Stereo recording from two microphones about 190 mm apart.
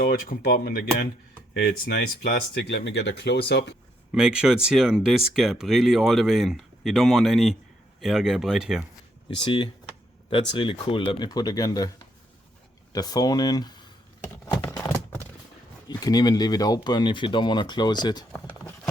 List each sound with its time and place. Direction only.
0.0 s speech: 50° left (ahead or behind); by 3.8 s 65° left (ahead or behind)
4.1 s speech: 5° right (ahead or behind)
9.4 s speech: 25° left (ahead or behind)
12.9 s speech: 20° left (ahead or behind)
15.9 s speech: 20° left (ahead or behind)